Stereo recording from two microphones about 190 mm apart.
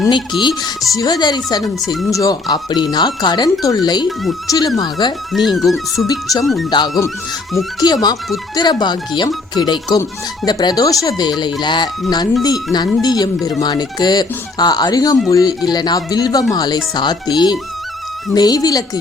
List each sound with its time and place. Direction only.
0.0 s speech: 25° left (ahead or behind)
1.6 s speech: centre (ahead or behind)
2.1 s speech: 20° left (ahead or behind)
5.3 s speech: centre (ahead or behind)
6.7 s speech: 20° left (ahead or behind)